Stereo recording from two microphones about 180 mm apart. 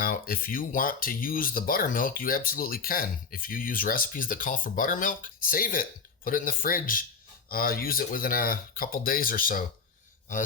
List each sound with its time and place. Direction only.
0.0 s speech: 50° left (ahead or behind)